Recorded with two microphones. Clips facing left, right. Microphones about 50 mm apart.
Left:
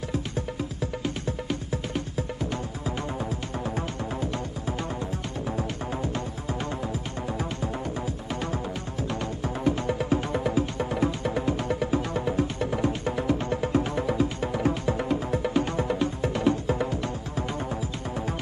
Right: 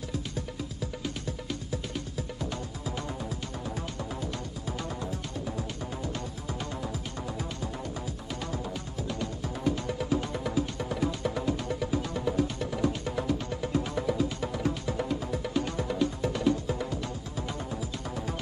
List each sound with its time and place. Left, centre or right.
0.1 s music: left
3.3 s music: left
9.2 s music: left